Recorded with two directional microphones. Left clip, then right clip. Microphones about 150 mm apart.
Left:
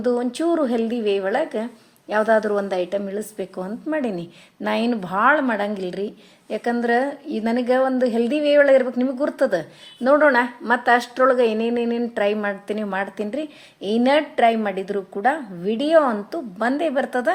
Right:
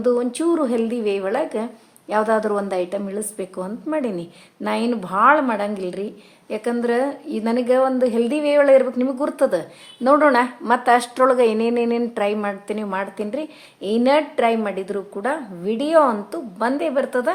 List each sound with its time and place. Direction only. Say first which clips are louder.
0.0 s speech: right 2 dB; centre (ahead or behind)
12.2 s a woman's voice: even; 5° left (ahead or behind)